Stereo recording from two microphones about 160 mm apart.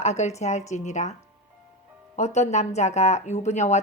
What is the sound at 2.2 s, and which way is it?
Speech, 45° left (ahead or behind).